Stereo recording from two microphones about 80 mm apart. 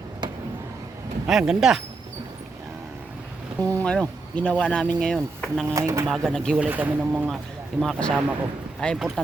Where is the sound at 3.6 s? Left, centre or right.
Left.